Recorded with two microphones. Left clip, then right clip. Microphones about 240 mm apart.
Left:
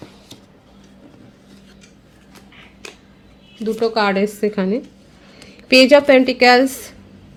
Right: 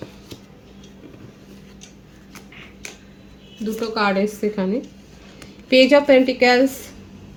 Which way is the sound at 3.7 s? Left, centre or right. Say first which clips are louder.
Left 3 dB; left.